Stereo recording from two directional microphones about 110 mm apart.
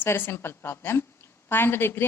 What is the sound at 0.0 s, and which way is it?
A woman's voice, 20° left (ahead or behind).